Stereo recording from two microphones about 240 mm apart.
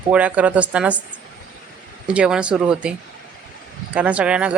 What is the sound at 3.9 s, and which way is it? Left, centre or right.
Speech, centre.